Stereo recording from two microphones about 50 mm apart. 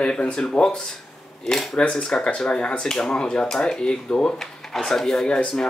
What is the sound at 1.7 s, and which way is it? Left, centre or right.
Speech, left.